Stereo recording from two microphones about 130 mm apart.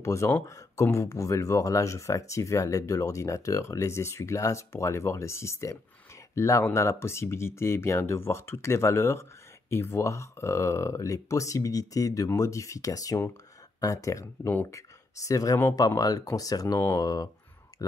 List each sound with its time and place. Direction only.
0.0 s speech: 20° left (ahead or behind)
14.2 s speech: 15° left (ahead or behind); by 17.3 s 30° left (ahead or behind)